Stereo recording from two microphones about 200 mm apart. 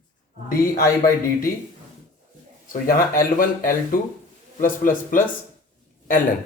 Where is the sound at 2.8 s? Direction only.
45° left (ahead or behind).